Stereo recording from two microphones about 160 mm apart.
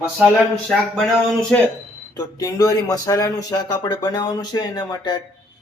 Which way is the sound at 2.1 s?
25° left (ahead or behind).